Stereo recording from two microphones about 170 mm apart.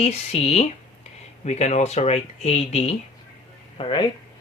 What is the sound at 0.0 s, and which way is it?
Speech, 40° left (ahead or behind).